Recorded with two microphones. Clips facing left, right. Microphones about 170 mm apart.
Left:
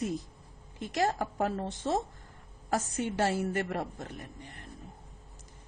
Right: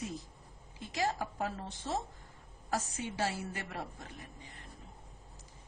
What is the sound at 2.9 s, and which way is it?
A woman's voice, 65° left (ahead or behind).